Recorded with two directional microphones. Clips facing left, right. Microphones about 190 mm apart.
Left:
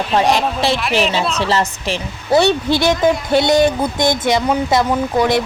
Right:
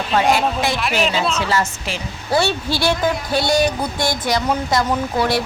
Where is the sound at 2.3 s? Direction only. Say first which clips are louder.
Left 6 dB; 20° left (ahead or behind).